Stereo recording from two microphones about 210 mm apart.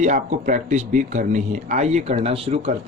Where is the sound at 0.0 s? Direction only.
35° right (ahead or behind).